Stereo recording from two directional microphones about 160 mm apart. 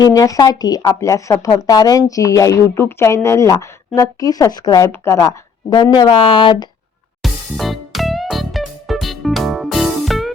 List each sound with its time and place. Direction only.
0.0 s speech: 20° left (ahead or behind)
7.2 s music: centre (ahead or behind)